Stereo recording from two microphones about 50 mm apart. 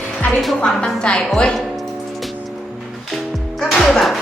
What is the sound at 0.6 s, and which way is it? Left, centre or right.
Speech, centre.